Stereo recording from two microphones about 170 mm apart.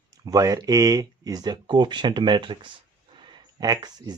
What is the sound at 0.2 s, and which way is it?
Speech, 20° right (ahead or behind).